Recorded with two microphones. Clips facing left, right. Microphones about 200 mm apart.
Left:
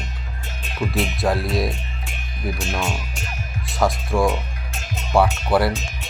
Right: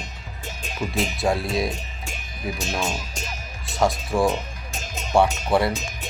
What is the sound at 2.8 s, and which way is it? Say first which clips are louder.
Speech: left 1 dB; 40° right (ahead or behind).